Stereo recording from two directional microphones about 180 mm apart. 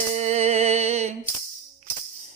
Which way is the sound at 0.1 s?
40° right (ahead or behind).